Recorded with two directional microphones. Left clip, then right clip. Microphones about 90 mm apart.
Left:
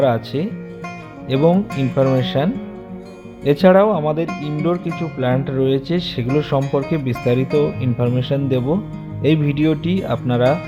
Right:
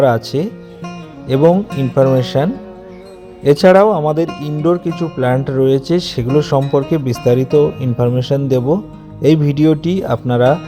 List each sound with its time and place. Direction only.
0.0 s speech: 55° right (ahead or behind)